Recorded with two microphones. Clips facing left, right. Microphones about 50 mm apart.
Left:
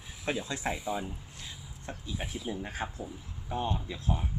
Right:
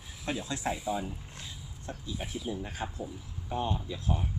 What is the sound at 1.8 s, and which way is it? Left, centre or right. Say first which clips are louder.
Speech: even; left.